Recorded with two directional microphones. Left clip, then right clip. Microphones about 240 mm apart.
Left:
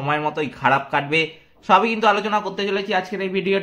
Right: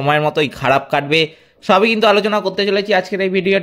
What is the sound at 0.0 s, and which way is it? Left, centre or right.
A man's voice, right.